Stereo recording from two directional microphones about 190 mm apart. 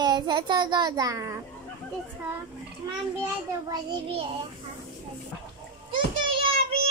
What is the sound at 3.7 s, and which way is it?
Speech, 30° right (ahead or behind).